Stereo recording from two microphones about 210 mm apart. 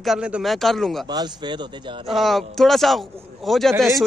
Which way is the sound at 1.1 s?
20° right (ahead or behind).